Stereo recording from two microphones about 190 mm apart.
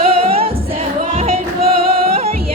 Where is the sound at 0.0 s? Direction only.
30° right (ahead or behind).